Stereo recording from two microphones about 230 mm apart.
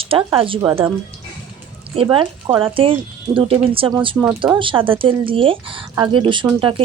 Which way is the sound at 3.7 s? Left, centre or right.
Right.